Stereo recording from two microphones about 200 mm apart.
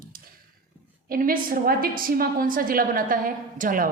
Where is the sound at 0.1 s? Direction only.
45° right (ahead or behind).